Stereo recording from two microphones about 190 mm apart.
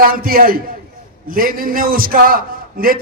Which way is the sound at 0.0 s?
50° right (ahead or behind).